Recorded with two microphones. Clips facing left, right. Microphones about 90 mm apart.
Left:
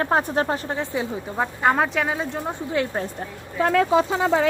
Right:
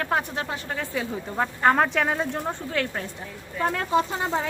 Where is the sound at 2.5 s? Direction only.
15° left (ahead or behind).